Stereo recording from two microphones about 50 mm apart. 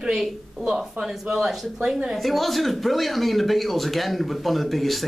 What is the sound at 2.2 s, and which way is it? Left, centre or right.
Speech, centre.